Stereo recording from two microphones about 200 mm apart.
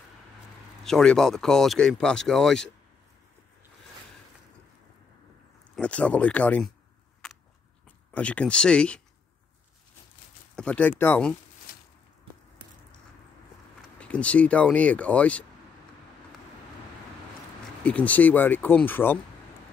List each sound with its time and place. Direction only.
0.8 s speech: 5° left (ahead or behind)
5.8 s speech: 5° left (ahead or behind)
8.1 s speech: 5° left (ahead or behind)
10.5 s speech: 5° left (ahead or behind)
11.7 s a sound: 45° left (ahead or behind)
13.9 s speech: 5° left (ahead or behind)
17.8 s speech: 5° left (ahead or behind)